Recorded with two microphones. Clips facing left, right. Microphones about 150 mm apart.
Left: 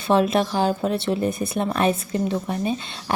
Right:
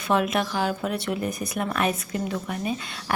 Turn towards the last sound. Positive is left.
turn(degrees=25)  # may be behind; listen again after turning